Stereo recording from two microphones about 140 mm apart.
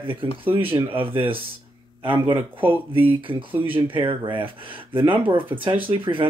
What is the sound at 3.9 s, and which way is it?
Speech, 35° right (ahead or behind).